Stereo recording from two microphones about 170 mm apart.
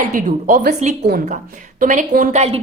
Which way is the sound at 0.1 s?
50° right (ahead or behind).